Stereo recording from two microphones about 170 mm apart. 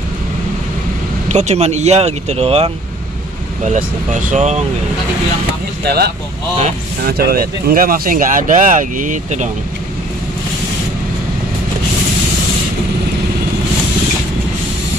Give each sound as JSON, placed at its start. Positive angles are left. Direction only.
{"t": 1.3, "sound": "speech", "side_deg": -40}
{"t": 3.6, "sound": "speech", "side_deg": -45}
{"t": 5.9, "sound": "speech", "side_deg": -70}